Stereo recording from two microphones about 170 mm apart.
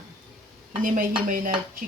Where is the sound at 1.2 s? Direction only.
55° right (ahead or behind).